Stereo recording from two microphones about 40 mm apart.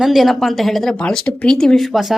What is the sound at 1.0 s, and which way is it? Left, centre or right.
Speech, left.